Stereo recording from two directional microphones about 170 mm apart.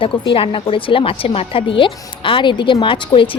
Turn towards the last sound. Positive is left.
turn(degrees=30)  # may be behind; listen again after turning